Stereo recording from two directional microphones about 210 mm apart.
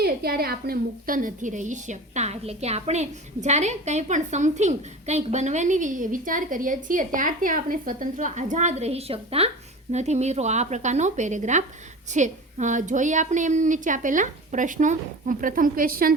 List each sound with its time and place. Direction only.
0.0 s a woman's voice: 45° right (ahead or behind)